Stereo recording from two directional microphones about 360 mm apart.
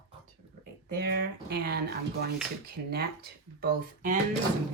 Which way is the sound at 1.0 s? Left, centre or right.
Right.